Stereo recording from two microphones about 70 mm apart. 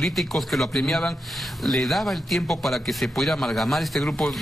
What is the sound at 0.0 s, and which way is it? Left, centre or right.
Speech, centre.